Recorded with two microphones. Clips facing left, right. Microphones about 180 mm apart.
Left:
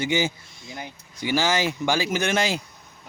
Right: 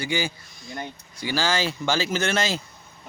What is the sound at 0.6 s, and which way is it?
Speech, 5° left (ahead or behind).